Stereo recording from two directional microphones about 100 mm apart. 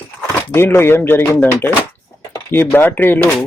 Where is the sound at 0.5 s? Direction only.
25° left (ahead or behind).